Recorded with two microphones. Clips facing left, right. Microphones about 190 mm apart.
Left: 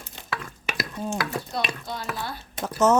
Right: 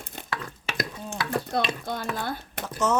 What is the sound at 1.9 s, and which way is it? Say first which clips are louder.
Speech: right 2 dB; 55° right (ahead or behind).